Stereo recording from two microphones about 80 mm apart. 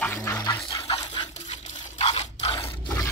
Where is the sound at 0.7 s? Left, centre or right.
Left.